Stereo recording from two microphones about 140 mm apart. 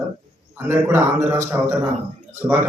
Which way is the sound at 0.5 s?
15° right (ahead or behind).